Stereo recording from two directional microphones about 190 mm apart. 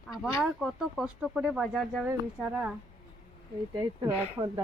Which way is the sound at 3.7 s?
20° right (ahead or behind).